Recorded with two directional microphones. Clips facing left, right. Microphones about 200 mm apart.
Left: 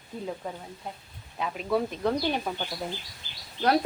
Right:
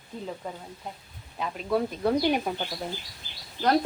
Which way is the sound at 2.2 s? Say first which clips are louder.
Right 3 dB; 10° right (ahead or behind).